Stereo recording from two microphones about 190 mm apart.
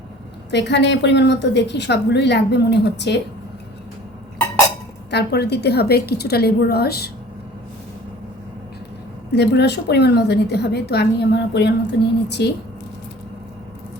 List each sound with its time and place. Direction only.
0.5 s a woman's voice: 65° left (ahead or behind)
5.1 s a woman's voice: 60° left (ahead or behind)
9.3 s a woman's voice: 60° left (ahead or behind)